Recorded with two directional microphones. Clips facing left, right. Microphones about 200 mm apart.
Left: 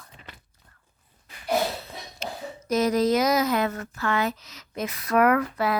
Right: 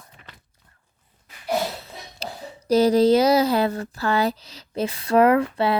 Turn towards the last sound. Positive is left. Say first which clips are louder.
# right 4 dB
turn(degrees=-30)  # may be behind; listen again after turning